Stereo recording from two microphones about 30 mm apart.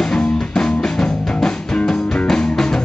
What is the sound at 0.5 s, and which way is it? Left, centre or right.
Music, left.